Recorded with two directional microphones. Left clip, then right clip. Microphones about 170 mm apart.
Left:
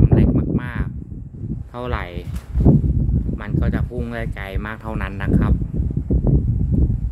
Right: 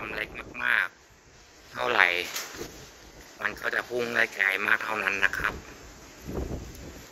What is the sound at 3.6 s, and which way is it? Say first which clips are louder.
Speech: left 8 dB; 45° left (ahead or behind).